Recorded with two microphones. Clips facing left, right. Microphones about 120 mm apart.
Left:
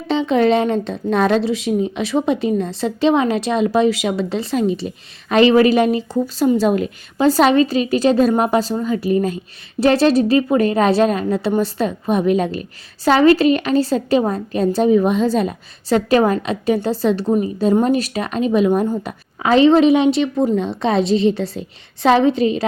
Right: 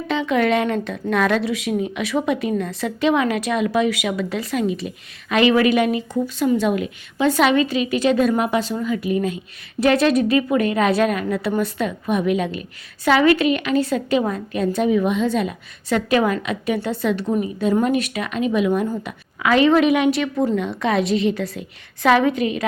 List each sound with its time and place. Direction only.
0.1 s a woman's voice: 25° left (ahead or behind)